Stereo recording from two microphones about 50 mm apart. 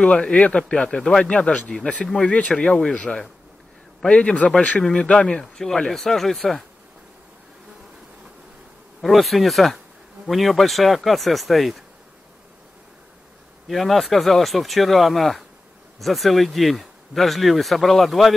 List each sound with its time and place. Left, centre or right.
0.0 s speech: left
5.4 s speech: centre
9.0 s speech: centre
13.7 s speech: centre